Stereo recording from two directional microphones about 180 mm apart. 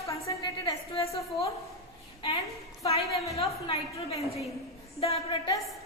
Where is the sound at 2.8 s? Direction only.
35° left (ahead or behind).